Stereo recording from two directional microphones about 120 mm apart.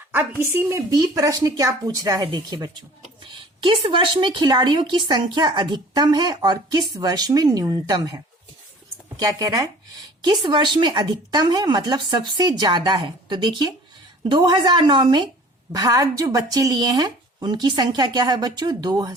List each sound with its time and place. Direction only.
0.1 s a woman's voice: 15° right (ahead or behind)
0.9 s speech: 30° right (ahead or behind)
10.2 s speech: 40° right (ahead or behind)